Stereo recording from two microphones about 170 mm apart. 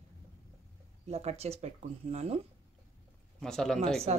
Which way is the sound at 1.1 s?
40° right (ahead or behind).